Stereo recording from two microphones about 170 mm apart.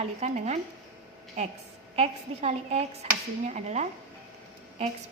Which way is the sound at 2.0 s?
40° right (ahead or behind).